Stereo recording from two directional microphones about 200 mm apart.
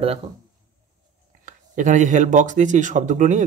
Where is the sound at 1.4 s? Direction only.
40° right (ahead or behind).